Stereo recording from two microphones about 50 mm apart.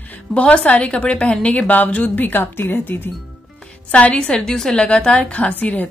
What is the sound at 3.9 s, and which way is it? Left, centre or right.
A woman's voice, left.